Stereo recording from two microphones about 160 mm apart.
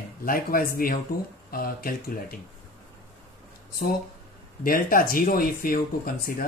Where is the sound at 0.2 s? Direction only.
65° left (ahead or behind).